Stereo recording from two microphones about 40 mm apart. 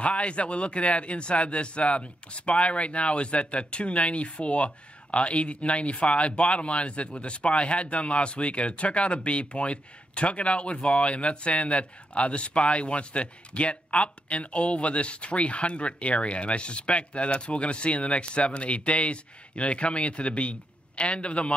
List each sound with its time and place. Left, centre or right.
0.0 s speech: left